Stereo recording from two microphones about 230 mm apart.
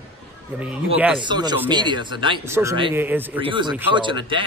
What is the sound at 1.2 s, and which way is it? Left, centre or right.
A man's voice, centre.